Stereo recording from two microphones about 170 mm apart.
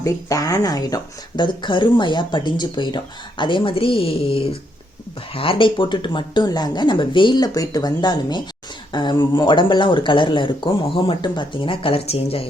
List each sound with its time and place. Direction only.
0.0 s speech: 20° left (ahead or behind); by 12.5 s 35° left (ahead or behind)